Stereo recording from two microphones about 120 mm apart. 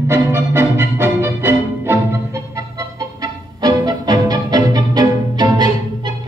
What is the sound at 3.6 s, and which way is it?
Music, 35° right (ahead or behind).